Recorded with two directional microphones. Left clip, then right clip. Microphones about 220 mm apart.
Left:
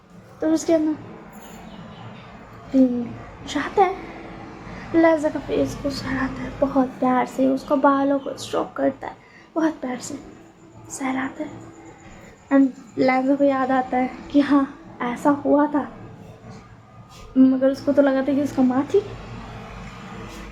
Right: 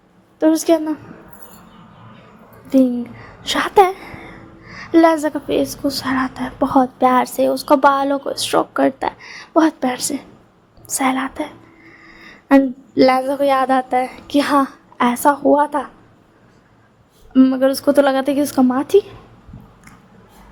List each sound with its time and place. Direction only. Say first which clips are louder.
0.3 s a woman's voice: right 5 dB; 40° right (ahead or behind)
3.4 s a woman's voice: right 7 dB; 50° right (ahead or behind)
13.0 s a woman's voice: right 5 dB; 50° right (ahead or behind)
17.3 s a woman's voice: right 4 dB; 45° right (ahead or behind)